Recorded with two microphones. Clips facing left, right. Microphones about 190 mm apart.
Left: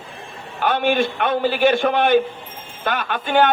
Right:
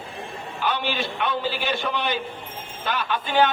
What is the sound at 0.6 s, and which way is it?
A man's voice, 55° left (ahead or behind).